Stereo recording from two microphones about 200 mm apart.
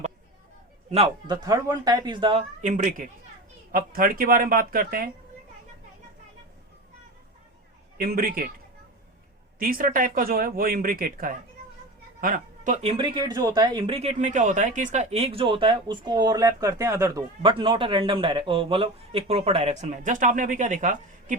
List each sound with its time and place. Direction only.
0.9 s speech: 30° right (ahead or behind)
2.6 s speech: 40° right (ahead or behind)
7.9 s speech: 45° right (ahead or behind)
9.6 s speech: 45° right (ahead or behind)